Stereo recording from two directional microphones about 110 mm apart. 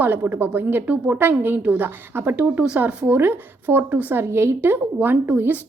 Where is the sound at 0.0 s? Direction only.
15° right (ahead or behind).